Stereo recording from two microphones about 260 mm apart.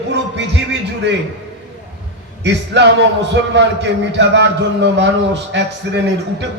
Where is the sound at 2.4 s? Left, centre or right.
Right.